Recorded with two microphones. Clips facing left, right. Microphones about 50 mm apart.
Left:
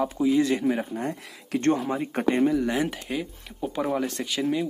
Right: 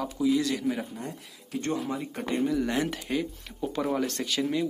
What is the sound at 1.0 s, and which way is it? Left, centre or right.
Speech, left.